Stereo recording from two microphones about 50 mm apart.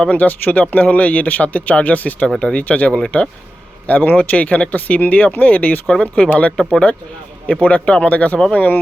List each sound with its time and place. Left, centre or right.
0.1 s a man's voice: left
5.9 s a man's voice: centre
6.6 s speech: centre
7.4 s a man's voice: left